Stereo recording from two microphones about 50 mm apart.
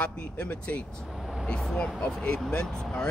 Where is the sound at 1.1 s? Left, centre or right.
Centre.